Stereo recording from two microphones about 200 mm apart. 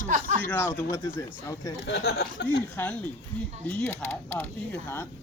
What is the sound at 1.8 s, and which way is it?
Speech, 60° left (ahead or behind).